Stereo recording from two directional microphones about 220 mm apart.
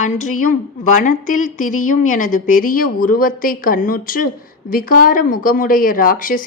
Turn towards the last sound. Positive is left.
turn(degrees=40)  # may be behind; listen again after turning